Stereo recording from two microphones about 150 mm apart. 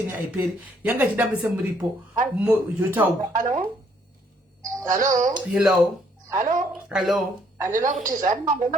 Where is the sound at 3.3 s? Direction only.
60° right (ahead or behind).